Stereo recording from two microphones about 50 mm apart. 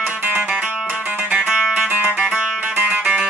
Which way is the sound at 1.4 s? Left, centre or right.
Centre.